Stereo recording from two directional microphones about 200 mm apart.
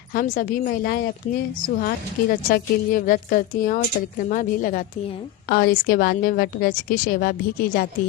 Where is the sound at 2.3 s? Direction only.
45° left (ahead or behind).